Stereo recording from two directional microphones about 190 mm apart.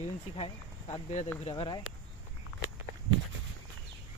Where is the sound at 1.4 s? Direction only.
25° left (ahead or behind).